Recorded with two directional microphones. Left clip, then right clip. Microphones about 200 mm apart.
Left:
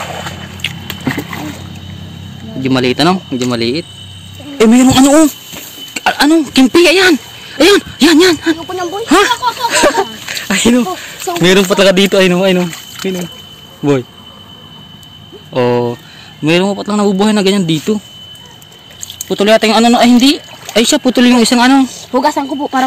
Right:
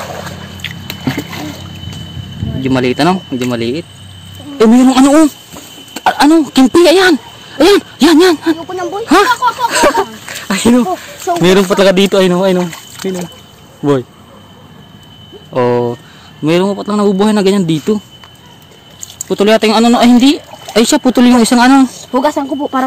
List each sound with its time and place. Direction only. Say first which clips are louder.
0.0 s a sound: left 1 dB; 45° right (ahead or behind)
2.6 s speech: even; centre (ahead or behind)
9.3 s speech: right 2 dB; 15° right (ahead or behind)
9.7 s speech: left 2 dB; 5° right (ahead or behind)
12.6 s speech: left 1 dB; 45° right (ahead or behind)
13.8 s speech: even; centre (ahead or behind)
15.5 s speech: even; centre (ahead or behind)
19.2 s speech: even; 5° right (ahead or behind)